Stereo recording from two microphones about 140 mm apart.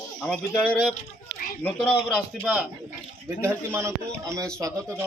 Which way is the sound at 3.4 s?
20° right (ahead or behind).